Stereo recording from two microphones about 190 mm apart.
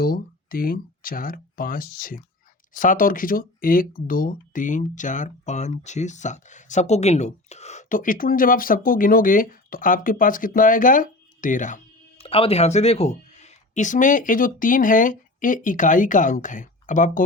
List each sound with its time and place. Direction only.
0.0 s speech: 50° left (ahead or behind)